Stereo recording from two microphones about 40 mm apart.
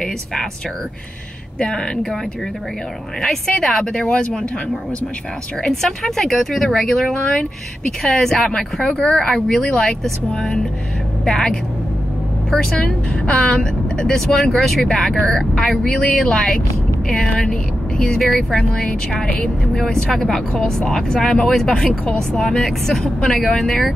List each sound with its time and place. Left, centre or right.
0.0 s speech: centre
1.6 s a woman's voice: left
3.6 s a woman's voice: centre
5.6 s speech: centre
13.1 s a woman's voice: left
18.7 s a woman's voice: left
19.2 s speech: left
19.7 s a woman's voice: centre